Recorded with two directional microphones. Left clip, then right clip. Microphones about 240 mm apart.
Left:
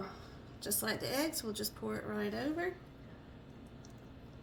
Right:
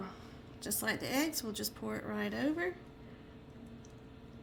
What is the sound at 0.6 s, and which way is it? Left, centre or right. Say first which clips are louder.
Speech: right 1 dB; right.